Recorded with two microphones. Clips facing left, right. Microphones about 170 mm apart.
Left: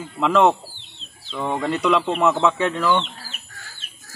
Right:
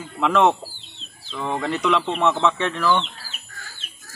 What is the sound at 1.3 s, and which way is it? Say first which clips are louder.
Speech: left 2 dB; 5° left (ahead or behind).